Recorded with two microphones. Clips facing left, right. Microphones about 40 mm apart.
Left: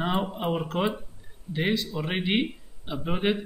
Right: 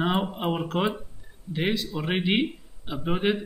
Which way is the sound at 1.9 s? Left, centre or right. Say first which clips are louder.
Right 2 dB; centre.